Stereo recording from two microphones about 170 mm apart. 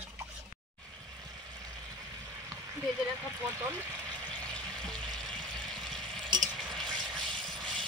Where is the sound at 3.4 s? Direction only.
15° right (ahead or behind).